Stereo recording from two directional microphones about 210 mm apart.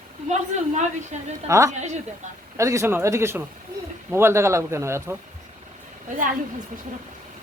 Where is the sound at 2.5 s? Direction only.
15° right (ahead or behind).